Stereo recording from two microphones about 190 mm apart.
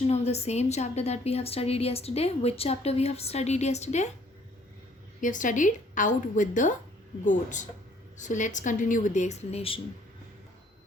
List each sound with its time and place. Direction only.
0.1 s a woman's voice: 35° left (ahead or behind)
5.2 s a woman's voice: 45° left (ahead or behind)